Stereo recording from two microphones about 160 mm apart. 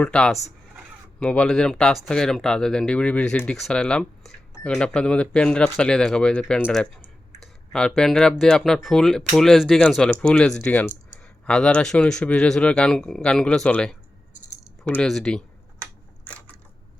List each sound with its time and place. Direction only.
0.0 s speech: 5° left (ahead or behind)
14.8 s typing: 5° left (ahead or behind)